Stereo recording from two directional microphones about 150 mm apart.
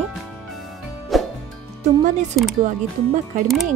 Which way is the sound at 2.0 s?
55° right (ahead or behind).